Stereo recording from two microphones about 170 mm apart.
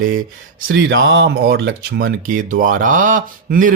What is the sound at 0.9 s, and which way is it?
Speech, 90° right.